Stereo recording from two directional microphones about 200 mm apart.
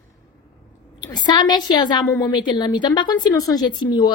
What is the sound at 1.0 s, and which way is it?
Speech, 20° left (ahead or behind).